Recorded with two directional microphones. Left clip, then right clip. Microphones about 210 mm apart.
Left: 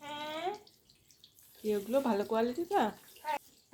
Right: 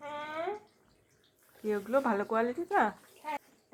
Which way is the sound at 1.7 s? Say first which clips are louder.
Right 2 dB; centre (ahead or behind).